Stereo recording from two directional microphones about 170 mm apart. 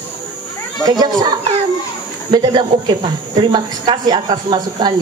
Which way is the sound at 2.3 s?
25° right (ahead or behind).